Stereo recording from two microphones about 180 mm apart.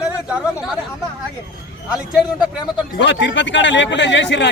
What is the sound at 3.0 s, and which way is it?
A man's voice, 90° left.